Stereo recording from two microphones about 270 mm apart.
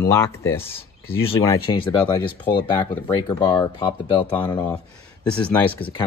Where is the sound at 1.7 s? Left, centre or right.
Centre.